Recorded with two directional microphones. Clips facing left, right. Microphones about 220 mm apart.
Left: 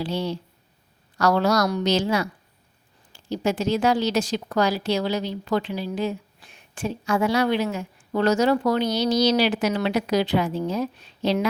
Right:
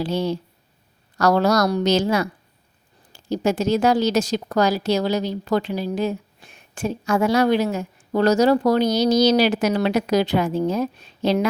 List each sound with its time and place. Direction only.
0.0 s a woman's voice: 45° right (ahead or behind)